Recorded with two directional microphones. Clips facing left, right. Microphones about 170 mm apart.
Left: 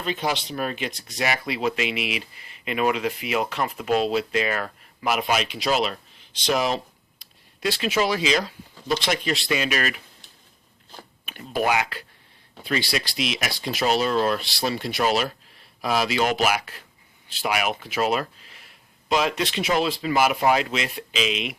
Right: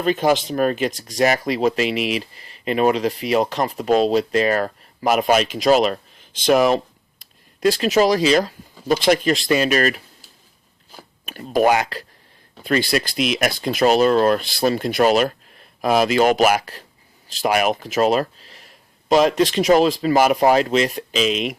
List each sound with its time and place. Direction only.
0.0 s speech: 50° right (ahead or behind)
11.3 s speech: 45° right (ahead or behind)